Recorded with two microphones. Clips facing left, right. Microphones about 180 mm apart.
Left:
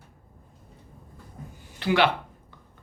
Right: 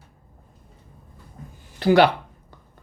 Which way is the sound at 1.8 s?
40° right (ahead or behind).